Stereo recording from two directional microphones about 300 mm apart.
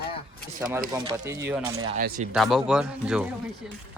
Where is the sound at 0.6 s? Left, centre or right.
Centre.